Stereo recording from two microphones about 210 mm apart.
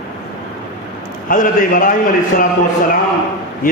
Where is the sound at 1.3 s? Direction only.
40° left (ahead or behind).